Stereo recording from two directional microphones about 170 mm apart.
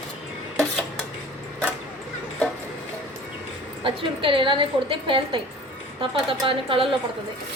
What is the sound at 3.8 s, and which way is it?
A woman's voice, 30° right (ahead or behind).